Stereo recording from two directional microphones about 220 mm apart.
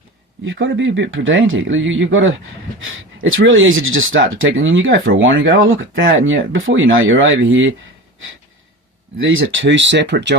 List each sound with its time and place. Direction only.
0.4 s a man's voice: 60° right (ahead or behind)
9.2 s a man's voice: 60° right (ahead or behind)